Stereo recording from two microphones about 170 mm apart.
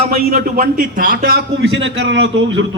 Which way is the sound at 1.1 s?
65° right (ahead or behind).